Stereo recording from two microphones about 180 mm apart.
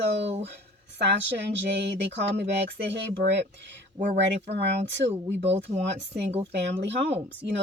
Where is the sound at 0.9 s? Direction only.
75° right (ahead or behind).